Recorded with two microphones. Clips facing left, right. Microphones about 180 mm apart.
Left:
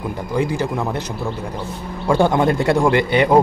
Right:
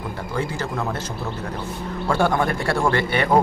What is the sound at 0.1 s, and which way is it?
Speech, 15° left (ahead or behind).